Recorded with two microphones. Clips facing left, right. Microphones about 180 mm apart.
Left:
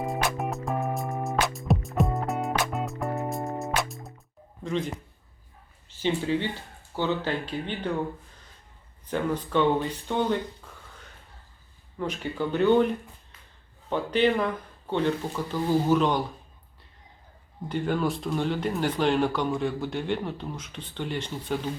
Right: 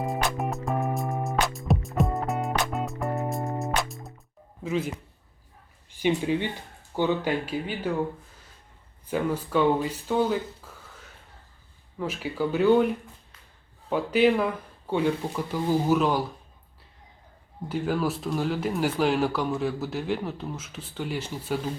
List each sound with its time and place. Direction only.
0.0 s music: centre (ahead or behind)
4.6 s speech: 5° right (ahead or behind)
5.9 s speech: 15° right (ahead or behind)
9.0 s speech: 5° right (ahead or behind)
11.9 s speech: 5° right (ahead or behind)
17.7 s speech: 5° right (ahead or behind)